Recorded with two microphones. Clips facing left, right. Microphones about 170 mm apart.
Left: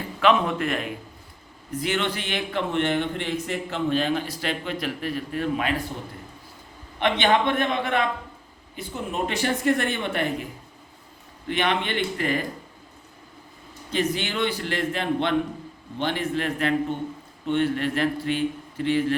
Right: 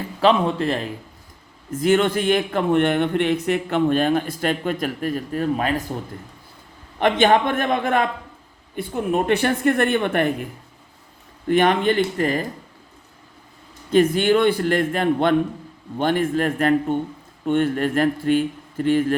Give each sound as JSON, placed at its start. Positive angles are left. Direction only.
{"t": 0.2, "sound": "speech", "side_deg": -30}
{"t": 1.7, "sound": "a man's voice", "side_deg": -45}
{"t": 7.0, "sound": "a man's voice", "side_deg": -45}
{"t": 11.4, "sound": "a man's voice", "side_deg": -45}
{"t": 13.9, "sound": "a man's voice", "side_deg": -50}